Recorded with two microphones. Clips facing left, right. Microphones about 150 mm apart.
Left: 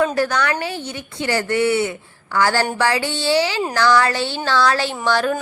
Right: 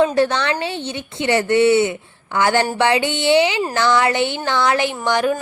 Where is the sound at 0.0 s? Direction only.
25° right (ahead or behind).